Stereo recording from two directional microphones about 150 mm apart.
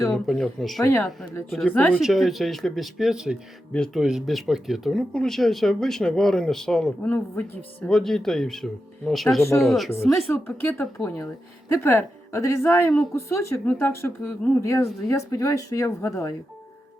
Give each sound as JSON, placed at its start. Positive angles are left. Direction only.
{"t": 0.1, "sound": "speech", "side_deg": 0}
{"t": 0.8, "sound": "speech", "side_deg": 20}
{"t": 1.5, "sound": "speech", "side_deg": 0}
{"t": 1.7, "sound": "speech", "side_deg": 15}
{"t": 2.0, "sound": "speech", "side_deg": 0}
{"t": 10.4, "sound": "speech", "side_deg": 15}